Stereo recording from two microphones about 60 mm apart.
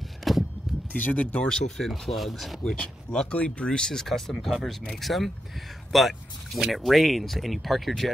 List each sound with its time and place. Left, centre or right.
0.2 s a sound: centre
0.9 s speech: left
1.5 s speech: centre
2.6 s speech: centre